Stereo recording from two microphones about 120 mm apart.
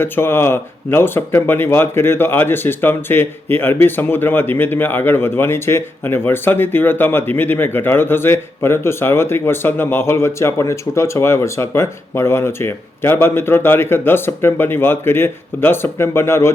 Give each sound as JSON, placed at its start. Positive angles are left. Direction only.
{"t": 0.0, "sound": "speech", "side_deg": 20}